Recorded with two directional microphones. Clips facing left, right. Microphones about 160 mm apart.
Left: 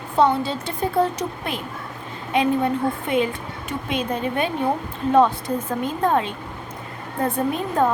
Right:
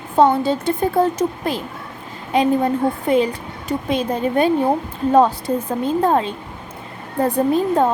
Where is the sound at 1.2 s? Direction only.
35° right (ahead or behind).